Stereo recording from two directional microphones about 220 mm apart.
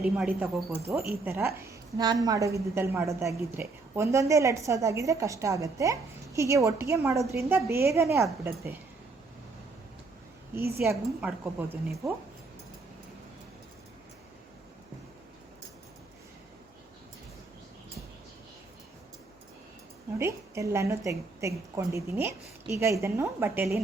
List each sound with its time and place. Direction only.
0.2 s a woman's voice: 5° right (ahead or behind)
10.8 s a woman's voice: 5° right (ahead or behind)
20.1 s a woman's voice: 10° right (ahead or behind)